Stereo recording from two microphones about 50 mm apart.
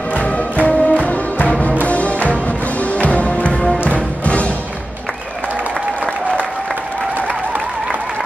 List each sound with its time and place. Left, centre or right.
0.1 s music: left
7.2 s applause: right